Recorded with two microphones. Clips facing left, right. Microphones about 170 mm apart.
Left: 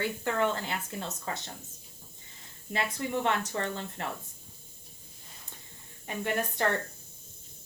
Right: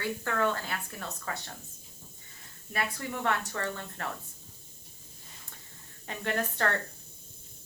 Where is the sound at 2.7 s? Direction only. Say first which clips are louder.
Left 3 dB; 20° left (ahead or behind).